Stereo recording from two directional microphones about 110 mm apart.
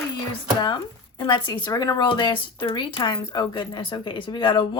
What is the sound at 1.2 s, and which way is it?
Speech, 45° left (ahead or behind).